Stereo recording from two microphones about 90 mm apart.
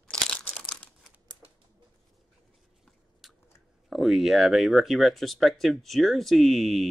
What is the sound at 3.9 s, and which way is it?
Speech, centre (ahead or behind).